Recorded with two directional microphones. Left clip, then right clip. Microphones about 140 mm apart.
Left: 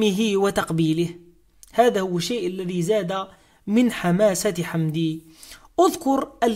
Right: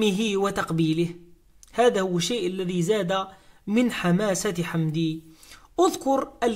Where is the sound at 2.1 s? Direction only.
15° left (ahead or behind).